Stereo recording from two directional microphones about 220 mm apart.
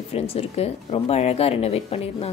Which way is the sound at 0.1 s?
25° left (ahead or behind).